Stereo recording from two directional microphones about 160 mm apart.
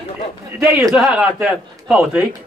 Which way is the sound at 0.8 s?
5° right (ahead or behind).